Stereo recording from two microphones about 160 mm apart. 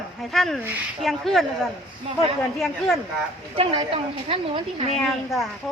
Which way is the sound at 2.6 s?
Centre (ahead or behind).